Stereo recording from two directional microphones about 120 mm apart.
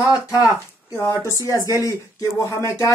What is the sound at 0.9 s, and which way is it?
Speech, 25° left (ahead or behind).